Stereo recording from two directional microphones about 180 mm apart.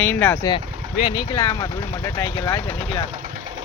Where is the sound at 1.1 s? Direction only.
15° left (ahead or behind).